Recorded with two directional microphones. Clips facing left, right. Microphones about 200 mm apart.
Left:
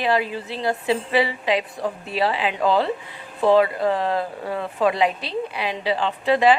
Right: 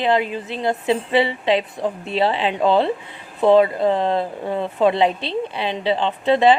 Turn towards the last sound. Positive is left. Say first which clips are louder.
# right 2 dB
turn(degrees=-25)  # may be behind; listen again after turning